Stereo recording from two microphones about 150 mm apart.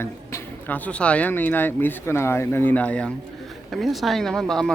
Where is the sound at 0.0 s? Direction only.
15° left (ahead or behind).